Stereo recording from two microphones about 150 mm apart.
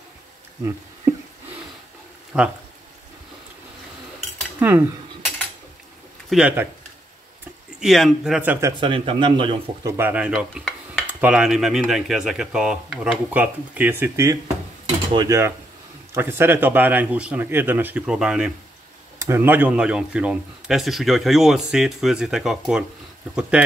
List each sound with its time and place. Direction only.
2.3 s speech: 5° right (ahead or behind)
4.6 s cutlery: 15° right (ahead or behind)
6.3 s speech: 10° right (ahead or behind)
7.8 s speech: centre (ahead or behind)
8.7 s a man's voice: 35° right (ahead or behind)
9.8 s speech: 15° right (ahead or behind)
10.3 s dishes: centre (ahead or behind)
11.1 s speech: 10° right (ahead or behind)
19.1 s speech: 15° right (ahead or behind)